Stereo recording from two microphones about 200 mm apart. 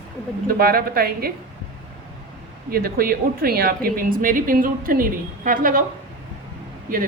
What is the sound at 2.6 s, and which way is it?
A woman's voice, 50° right (ahead or behind).